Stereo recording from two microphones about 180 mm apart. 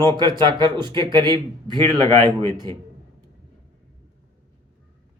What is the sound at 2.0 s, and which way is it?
Speech, 20° left (ahead or behind).